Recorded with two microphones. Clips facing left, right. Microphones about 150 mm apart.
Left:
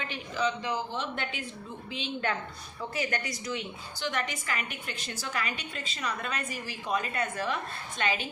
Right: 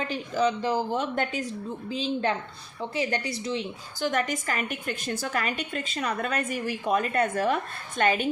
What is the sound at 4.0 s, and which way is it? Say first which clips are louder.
A woman's voice: right 6 dB; 45° right (ahead or behind).